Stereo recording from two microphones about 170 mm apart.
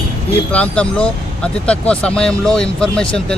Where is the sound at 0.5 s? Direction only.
5° left (ahead or behind).